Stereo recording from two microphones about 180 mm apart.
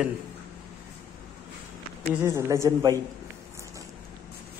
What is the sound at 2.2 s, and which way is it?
Speech, 15° right (ahead or behind).